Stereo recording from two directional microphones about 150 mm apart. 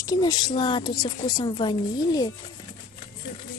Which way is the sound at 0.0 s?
25° left (ahead or behind).